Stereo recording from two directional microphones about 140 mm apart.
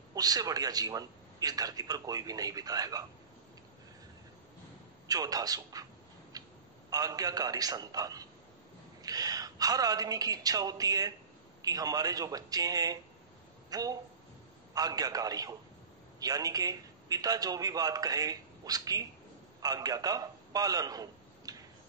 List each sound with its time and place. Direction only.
0.1 s a man's voice: 25° right (ahead or behind)
5.0 s a man's voice: 25° right (ahead or behind)
6.3 s a sound: 25° right (ahead or behind)
6.9 s a man's voice: 25° right (ahead or behind)